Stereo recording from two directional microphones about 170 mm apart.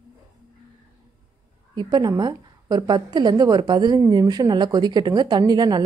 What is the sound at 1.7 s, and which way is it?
A woman's voice, 25° right (ahead or behind).